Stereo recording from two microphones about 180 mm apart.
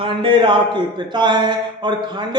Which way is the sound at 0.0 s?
30° right (ahead or behind).